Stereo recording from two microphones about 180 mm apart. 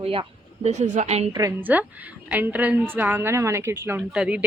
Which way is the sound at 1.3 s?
20° right (ahead or behind).